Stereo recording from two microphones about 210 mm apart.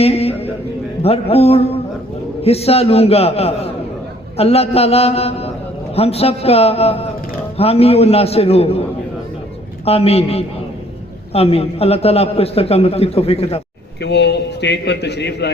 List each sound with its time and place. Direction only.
0.0 s a man's voice: 30° left (ahead or behind)
9.8 s a man's voice: 30° left (ahead or behind)
14.0 s a man's voice: 55° left (ahead or behind)